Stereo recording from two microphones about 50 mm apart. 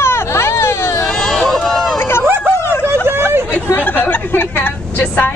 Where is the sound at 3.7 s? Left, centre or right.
Left.